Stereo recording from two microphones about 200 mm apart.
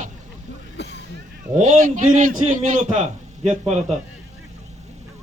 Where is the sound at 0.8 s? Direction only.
55° left (ahead or behind).